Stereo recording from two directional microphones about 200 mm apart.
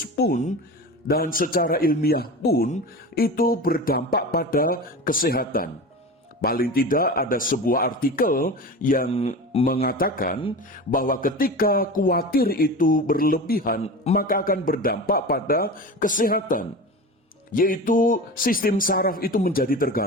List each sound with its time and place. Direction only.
0.2 s speech: 40° left (ahead or behind)
9.0 s speech: 30° left (ahead or behind)
9.8 s speech: 45° left (ahead or behind)
13.8 s a man's voice: 30° left (ahead or behind)
14.2 s speech: 45° left (ahead or behind)